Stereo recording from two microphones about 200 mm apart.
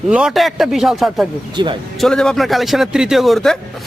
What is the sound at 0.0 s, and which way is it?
A man's voice, 5° right (ahead or behind).